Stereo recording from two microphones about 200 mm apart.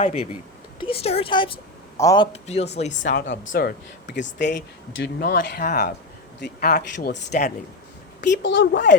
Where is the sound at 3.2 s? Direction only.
65° left (ahead or behind).